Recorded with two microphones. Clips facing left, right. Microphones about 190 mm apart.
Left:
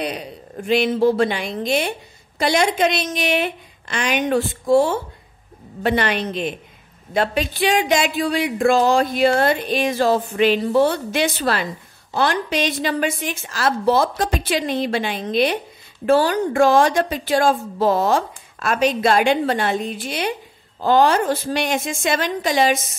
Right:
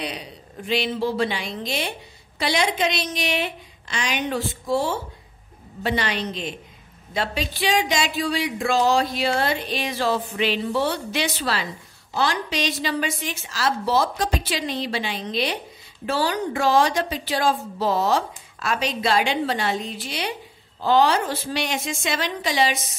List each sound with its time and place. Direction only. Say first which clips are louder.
0.0 s a woman's voice: left 5 dB; 50° left (ahead or behind)